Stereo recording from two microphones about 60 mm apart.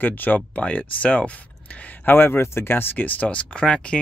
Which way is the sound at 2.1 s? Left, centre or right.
Left.